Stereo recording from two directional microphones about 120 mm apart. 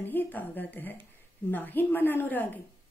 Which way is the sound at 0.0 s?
15° left (ahead or behind).